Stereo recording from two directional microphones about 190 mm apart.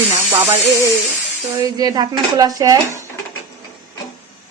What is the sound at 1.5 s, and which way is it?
Speech, 20° right (ahead or behind).